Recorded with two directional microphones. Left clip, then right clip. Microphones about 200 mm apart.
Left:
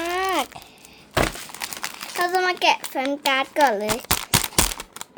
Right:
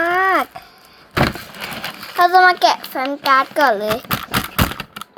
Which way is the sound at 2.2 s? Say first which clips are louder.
Right 10 dB; 20° left (ahead or behind).